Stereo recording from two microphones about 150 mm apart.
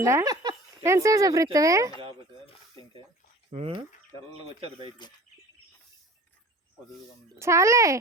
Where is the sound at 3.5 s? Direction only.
45° right (ahead or behind).